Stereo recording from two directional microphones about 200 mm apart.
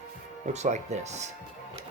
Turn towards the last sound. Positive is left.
turn(degrees=-35)  # may be behind; listen again after turning